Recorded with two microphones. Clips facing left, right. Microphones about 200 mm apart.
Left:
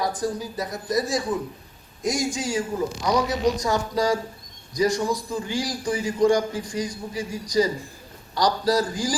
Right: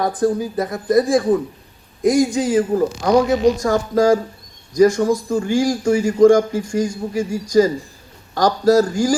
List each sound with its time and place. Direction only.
0.0 s speech: 55° right (ahead or behind)